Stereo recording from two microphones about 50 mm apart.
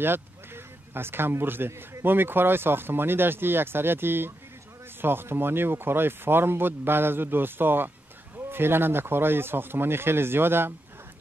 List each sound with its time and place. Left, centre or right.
0.9 s speech: right